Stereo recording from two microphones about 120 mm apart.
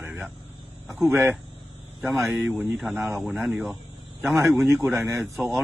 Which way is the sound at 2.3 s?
5° right (ahead or behind).